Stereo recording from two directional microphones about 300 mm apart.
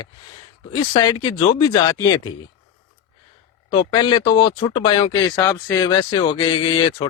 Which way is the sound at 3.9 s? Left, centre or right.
Centre.